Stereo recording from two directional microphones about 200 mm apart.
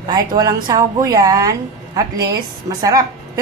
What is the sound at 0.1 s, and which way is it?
A woman's voice, 20° right (ahead or behind).